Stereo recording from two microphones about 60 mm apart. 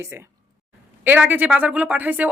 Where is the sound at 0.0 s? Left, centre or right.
Right.